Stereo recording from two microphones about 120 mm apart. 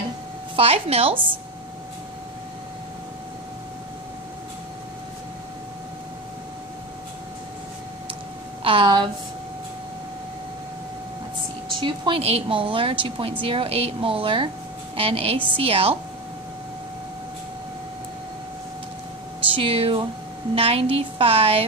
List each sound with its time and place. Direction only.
0.6 s speech: 55° right (ahead or behind)
8.6 s a woman's voice: 40° right (ahead or behind)
11.8 s speech: 45° right (ahead or behind)
19.5 s speech: 50° right (ahead or behind)